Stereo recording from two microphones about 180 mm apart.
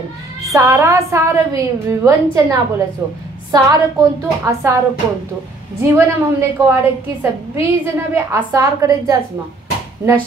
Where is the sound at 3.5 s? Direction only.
15° right (ahead or behind).